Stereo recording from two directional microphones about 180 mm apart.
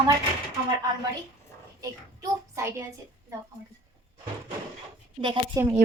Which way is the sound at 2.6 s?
15° right (ahead or behind).